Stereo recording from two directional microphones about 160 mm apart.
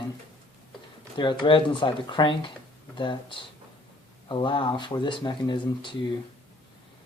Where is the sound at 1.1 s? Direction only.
30° left (ahead or behind).